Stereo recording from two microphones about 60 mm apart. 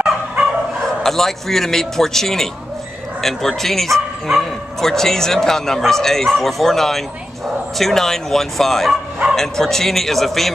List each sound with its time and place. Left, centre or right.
0.8 s speech: centre